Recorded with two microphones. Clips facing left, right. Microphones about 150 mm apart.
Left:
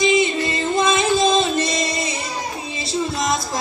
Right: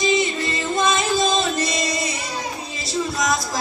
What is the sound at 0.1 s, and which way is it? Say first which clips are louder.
Music: left 3 dB; 25° left (ahead or behind).